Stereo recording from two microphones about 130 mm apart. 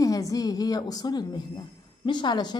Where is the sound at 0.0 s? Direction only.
25° left (ahead or behind).